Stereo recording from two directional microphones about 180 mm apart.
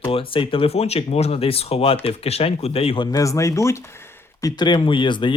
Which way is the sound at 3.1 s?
15° left (ahead or behind).